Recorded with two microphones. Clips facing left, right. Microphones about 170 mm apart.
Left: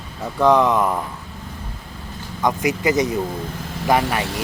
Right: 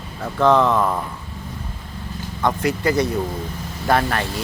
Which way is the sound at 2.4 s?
15° left (ahead or behind).